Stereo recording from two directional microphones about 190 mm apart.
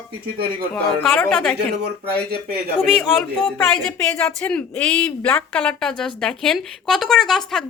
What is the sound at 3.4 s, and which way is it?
Speech, 5° left (ahead or behind).